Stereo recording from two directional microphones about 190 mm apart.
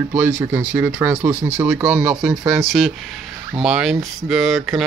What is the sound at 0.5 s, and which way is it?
Speech, 10° right (ahead or behind).